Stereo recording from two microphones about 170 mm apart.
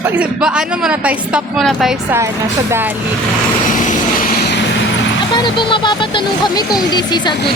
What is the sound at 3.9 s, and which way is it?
Vehicle, 55° left (ahead or behind).